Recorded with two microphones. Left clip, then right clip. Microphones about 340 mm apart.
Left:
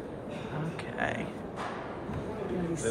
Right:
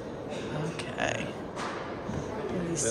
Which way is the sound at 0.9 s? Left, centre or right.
Centre.